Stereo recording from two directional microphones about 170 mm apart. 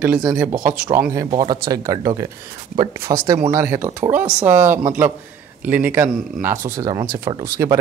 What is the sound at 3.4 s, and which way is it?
Speech, 15° right (ahead or behind).